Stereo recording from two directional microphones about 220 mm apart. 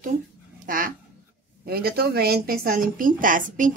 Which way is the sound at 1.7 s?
45° right (ahead or behind).